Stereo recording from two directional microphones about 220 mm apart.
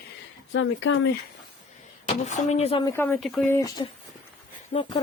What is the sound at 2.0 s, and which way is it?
Speech, 30° left (ahead or behind).